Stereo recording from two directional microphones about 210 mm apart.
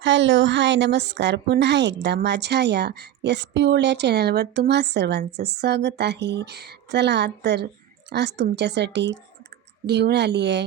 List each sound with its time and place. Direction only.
0.0 s a woman's voice: 60° right (ahead or behind)